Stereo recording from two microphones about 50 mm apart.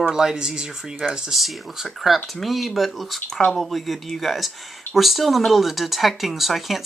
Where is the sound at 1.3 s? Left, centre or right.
Centre.